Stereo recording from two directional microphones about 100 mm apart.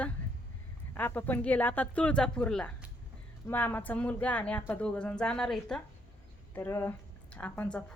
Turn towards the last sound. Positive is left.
turn(degrees=20)  # may be behind; listen again after turning